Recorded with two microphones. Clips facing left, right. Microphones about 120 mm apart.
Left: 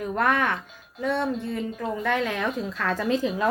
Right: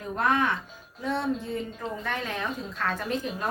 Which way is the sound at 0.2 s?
60° left (ahead or behind).